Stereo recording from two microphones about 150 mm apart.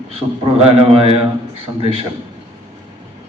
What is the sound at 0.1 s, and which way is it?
A man's voice, 40° right (ahead or behind).